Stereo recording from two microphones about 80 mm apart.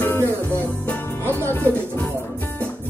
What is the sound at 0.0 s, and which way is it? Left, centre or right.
Music, left.